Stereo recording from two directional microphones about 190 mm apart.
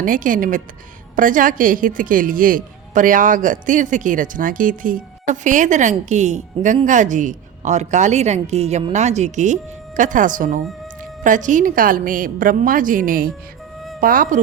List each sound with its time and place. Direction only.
0.0 s a woman's voice: 45° right (ahead or behind)